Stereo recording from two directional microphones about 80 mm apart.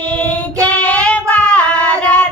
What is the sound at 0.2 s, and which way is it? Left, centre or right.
Child singing, centre.